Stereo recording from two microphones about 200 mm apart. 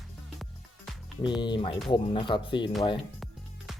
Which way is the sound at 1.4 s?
25° left (ahead or behind).